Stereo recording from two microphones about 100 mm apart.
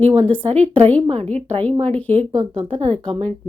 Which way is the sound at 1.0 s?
90° right.